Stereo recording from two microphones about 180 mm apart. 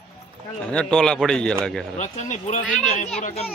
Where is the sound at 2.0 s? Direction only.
40° left (ahead or behind).